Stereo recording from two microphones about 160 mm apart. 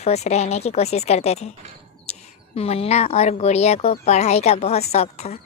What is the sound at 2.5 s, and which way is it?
Speech, 40° left (ahead or behind).